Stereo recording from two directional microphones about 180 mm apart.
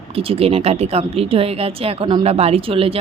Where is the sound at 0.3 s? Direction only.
35° right (ahead or behind).